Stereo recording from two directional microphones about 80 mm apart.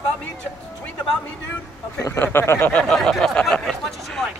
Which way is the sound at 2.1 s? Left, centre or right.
Left.